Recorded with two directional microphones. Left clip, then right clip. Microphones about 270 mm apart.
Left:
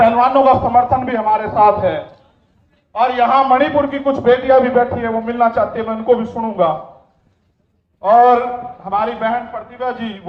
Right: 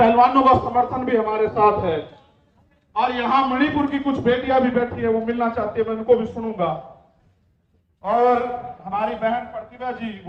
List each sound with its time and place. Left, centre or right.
0.0 s a man's voice: centre
2.9 s a man's voice: centre
8.0 s a man's voice: left